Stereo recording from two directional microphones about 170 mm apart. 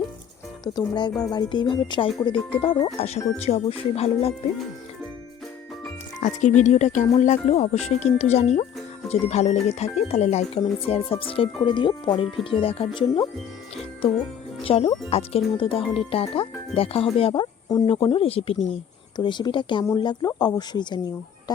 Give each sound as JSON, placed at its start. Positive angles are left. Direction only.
{"t": 0.6, "sound": "speech", "side_deg": 25}
{"t": 3.0, "sound": "speech", "side_deg": 40}
{"t": 6.1, "sound": "speech", "side_deg": 45}
{"t": 14.6, "sound": "speech", "side_deg": 35}